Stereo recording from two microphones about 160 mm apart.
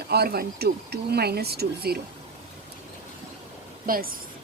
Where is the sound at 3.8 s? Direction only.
65° right (ahead or behind).